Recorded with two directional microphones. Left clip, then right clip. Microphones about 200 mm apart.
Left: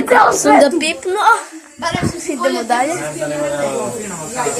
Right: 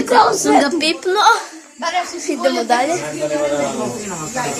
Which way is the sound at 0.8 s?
15° right (ahead or behind).